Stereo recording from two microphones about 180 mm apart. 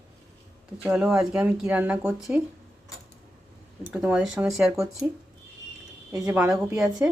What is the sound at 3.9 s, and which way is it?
Speech, 5° right (ahead or behind).